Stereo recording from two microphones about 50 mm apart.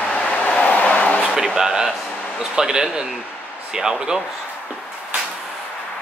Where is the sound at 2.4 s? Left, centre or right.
Centre.